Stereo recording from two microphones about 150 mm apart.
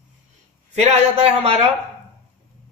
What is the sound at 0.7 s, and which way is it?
Speech, 50° right (ahead or behind).